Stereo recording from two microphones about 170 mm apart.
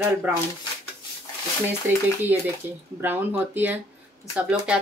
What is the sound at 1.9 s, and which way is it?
Speech, 15° right (ahead or behind).